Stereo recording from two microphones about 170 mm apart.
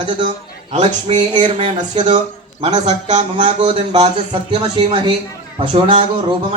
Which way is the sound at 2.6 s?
40° right (ahead or behind).